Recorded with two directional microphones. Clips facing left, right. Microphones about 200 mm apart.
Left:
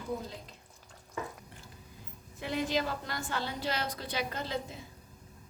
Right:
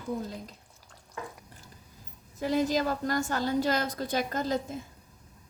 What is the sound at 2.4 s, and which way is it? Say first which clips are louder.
A woman's voice: right 5 dB; 40° right (ahead or behind).